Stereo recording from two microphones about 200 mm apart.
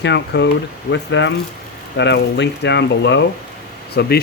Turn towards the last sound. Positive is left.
turn(degrees=50)  # may be behind; listen again after turning